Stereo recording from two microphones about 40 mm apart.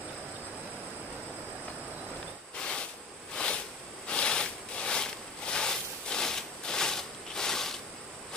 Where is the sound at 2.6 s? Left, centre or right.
Left.